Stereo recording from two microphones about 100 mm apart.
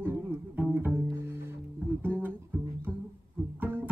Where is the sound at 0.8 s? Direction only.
20° right (ahead or behind).